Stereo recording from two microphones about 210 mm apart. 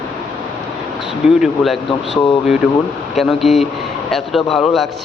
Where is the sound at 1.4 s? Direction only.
Centre (ahead or behind).